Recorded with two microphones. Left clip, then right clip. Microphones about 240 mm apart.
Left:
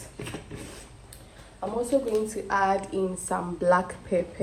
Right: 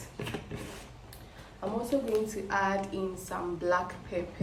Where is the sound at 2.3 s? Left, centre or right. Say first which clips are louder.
Left 5 dB; centre.